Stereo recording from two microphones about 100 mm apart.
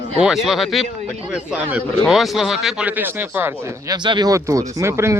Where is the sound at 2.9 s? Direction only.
20° right (ahead or behind).